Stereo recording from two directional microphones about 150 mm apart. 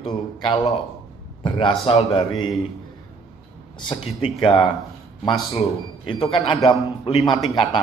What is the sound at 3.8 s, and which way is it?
Speech, 35° left (ahead or behind).